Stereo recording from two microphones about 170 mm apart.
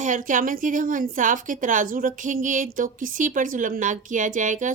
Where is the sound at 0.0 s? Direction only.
50° right (ahead or behind).